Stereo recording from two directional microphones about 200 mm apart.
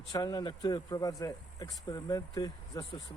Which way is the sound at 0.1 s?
20° left (ahead or behind).